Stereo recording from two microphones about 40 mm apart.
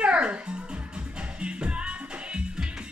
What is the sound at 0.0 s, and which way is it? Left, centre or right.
Music, right.